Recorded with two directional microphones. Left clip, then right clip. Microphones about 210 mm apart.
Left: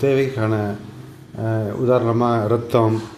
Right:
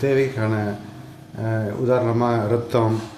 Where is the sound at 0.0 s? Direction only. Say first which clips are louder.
Left 2 dB; centre (ahead or behind).